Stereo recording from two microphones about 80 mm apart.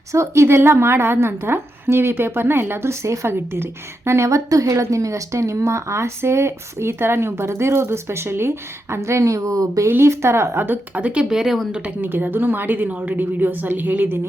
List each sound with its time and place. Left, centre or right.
0.1 s a woman's voice: right
9.9 s a woman's voice: right; by 11.7 s centre
12.0 s a woman's voice: right